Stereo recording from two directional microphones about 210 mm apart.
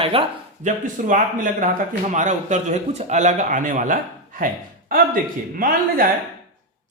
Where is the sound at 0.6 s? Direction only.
35° right (ahead or behind).